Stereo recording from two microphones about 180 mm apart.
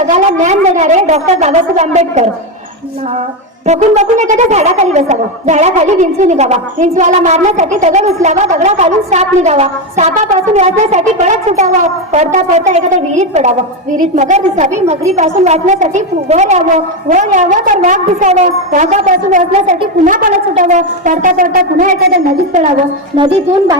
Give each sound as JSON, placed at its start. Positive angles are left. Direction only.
{"t": 0.1, "sound": "speech", "side_deg": -40}
{"t": 3.7, "sound": "a child's voice", "side_deg": -40}
{"t": 23.1, "sound": "a woman's voice", "side_deg": -25}